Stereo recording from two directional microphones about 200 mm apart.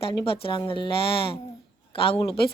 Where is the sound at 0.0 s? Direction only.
25° left (ahead or behind).